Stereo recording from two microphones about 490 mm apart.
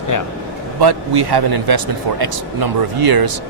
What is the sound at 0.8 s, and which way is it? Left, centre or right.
Speech, right.